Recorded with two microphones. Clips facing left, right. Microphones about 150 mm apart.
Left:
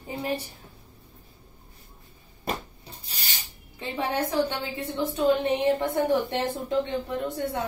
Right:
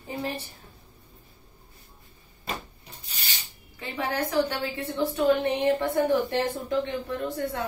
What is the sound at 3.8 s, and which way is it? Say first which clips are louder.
A woman's voice: left 1 dB; 25° left (ahead or behind).